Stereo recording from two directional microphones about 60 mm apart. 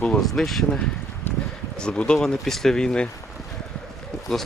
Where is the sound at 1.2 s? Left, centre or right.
Left.